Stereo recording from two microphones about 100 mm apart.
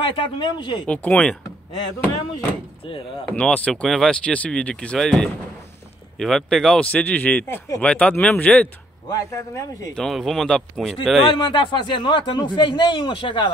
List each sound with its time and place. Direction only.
0.0 s speech: 55° left (ahead or behind)
0.8 s speech: 10° left (ahead or behind)
3.3 s speech: 10° left (ahead or behind)
7.8 s speech: 15° left (ahead or behind)
9.1 s speech: 30° left (ahead or behind)
9.9 s speech: 5° left (ahead or behind)
11.3 s speech: 55° left (ahead or behind)